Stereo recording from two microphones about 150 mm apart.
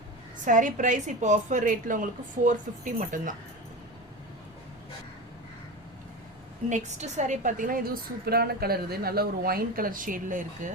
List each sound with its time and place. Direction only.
0.4 s a woman's voice: 60° right (ahead or behind)
6.7 s a woman's voice: 50° right (ahead or behind)
8.2 s speech: 90° right; by 10.7 s 60° right (ahead or behind)